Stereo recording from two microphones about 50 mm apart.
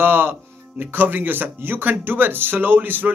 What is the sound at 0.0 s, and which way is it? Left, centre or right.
Speech, right.